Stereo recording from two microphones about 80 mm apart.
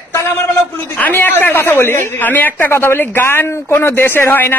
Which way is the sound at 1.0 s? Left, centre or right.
Left.